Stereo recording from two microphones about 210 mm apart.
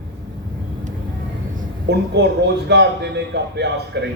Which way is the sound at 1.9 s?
55° right (ahead or behind).